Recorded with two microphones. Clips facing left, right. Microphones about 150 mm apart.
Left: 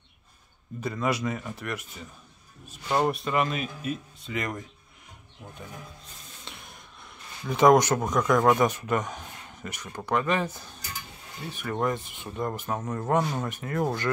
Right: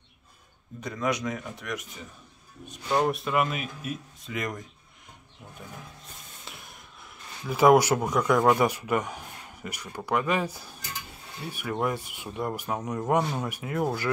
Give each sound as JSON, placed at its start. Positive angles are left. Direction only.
{"t": 0.7, "sound": "speech", "side_deg": 5}
{"t": 6.4, "sound": "music", "side_deg": 0}
{"t": 7.4, "sound": "speech", "side_deg": -5}